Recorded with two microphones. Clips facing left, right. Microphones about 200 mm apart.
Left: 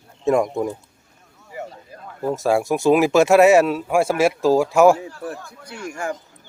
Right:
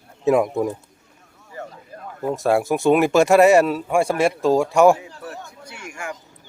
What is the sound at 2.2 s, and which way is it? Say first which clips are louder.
Speech: even; centre (ahead or behind).